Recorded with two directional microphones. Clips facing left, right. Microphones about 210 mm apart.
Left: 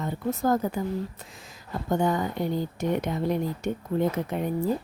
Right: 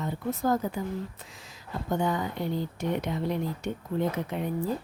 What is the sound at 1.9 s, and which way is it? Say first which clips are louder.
Speech: left 3 dB; 45° left (ahead or behind).